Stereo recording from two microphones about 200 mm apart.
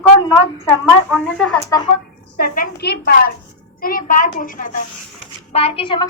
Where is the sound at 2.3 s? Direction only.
50° left (ahead or behind).